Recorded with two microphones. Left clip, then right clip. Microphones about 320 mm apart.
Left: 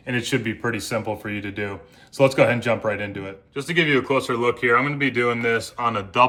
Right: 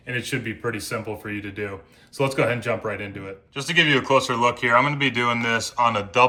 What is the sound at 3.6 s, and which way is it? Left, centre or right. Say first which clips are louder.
Speech: right 1 dB; centre.